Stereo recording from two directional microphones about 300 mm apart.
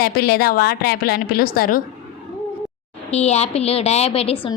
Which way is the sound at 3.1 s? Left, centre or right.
Left.